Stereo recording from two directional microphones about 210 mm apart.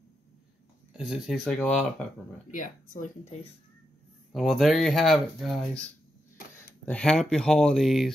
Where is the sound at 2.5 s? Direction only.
40° left (ahead or behind).